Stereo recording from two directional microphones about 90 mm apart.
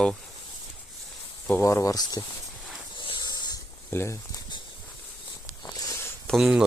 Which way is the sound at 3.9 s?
30° left (ahead or behind).